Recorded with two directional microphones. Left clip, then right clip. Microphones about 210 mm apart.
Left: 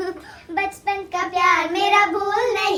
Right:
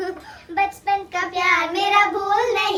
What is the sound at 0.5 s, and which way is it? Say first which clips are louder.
Child singing: right 2 dB; 15° left (ahead or behind).